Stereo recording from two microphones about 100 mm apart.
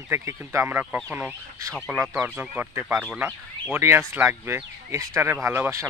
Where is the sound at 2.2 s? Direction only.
15° right (ahead or behind).